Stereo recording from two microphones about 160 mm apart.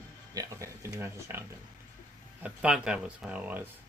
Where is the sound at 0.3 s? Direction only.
20° right (ahead or behind).